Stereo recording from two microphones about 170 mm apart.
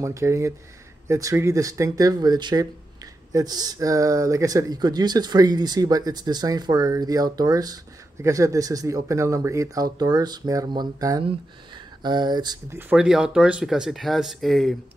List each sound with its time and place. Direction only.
0.0 s speech: 15° right (ahead or behind)
12.7 s speech: 5° right (ahead or behind)